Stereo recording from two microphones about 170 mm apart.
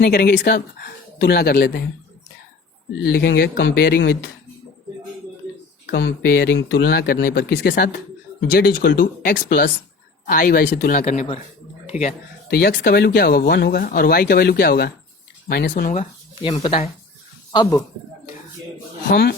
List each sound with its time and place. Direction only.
0.0 s speech: 65° left (ahead or behind)
3.0 s speech: 65° left (ahead or behind)
5.8 s speech: 90° left; by 11.0 s 60° left (ahead or behind)
11.0 s a man's voice: 40° left (ahead or behind)
12.5 s speech: 70° left (ahead or behind)
15.7 s speech: 45° left (ahead or behind)
17.5 s speech: 25° left (ahead or behind)
19.0 s speech: 70° left (ahead or behind)